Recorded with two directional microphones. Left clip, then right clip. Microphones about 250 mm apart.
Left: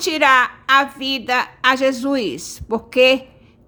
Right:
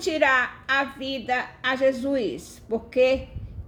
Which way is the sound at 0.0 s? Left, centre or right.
Left.